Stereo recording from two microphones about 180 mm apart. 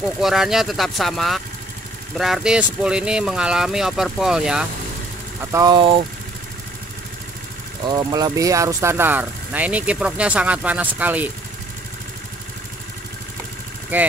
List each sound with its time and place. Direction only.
0.2 s speech: centre (ahead or behind)
5.4 s speech: 20° right (ahead or behind)
7.8 s speech: 20° right (ahead or behind)
13.9 s speech: 10° right (ahead or behind)